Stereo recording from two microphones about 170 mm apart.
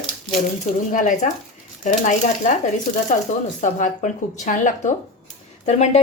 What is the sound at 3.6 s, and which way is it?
A woman's voice, 50° left (ahead or behind).